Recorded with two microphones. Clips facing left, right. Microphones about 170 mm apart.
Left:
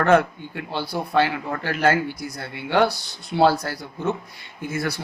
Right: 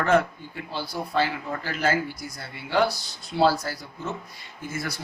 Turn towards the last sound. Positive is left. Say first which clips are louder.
# left 6 dB
turn(degrees=65)  # may be behind; listen again after turning